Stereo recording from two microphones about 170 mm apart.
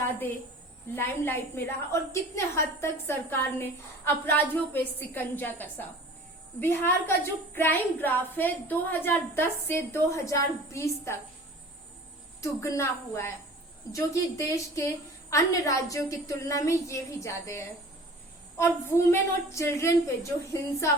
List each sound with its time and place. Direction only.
0.9 s a woman's voice: 15° left (ahead or behind)
12.4 s a woman's voice: 15° left (ahead or behind)